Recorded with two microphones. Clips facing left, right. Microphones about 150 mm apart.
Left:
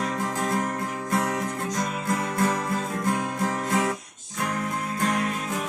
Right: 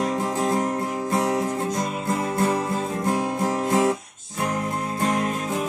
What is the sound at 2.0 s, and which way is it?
Music, 25° right (ahead or behind).